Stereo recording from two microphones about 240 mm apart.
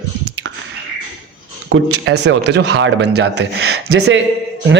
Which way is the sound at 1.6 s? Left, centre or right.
Right.